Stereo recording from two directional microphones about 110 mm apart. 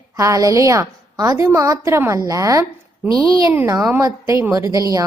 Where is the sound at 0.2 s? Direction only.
30° right (ahead or behind).